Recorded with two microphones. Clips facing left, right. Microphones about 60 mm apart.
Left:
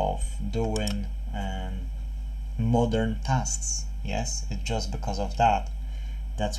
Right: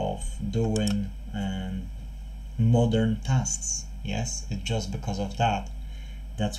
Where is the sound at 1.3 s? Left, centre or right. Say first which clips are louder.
Right 2 dB; left.